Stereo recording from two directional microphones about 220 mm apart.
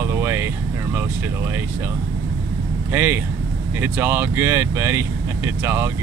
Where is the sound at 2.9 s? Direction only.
10° right (ahead or behind).